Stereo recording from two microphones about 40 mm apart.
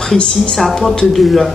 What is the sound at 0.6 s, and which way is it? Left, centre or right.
Speech, centre.